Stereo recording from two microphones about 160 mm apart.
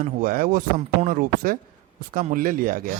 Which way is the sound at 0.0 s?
60° right (ahead or behind).